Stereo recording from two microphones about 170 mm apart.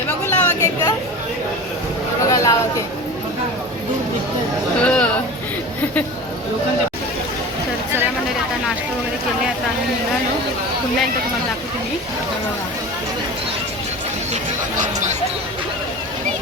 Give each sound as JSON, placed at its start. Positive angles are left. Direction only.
{"t": 0.3, "sound": "chatter", "side_deg": 15}
{"t": 2.3, "sound": "speech", "side_deg": 20}
{"t": 4.8, "sound": "speech", "side_deg": 5}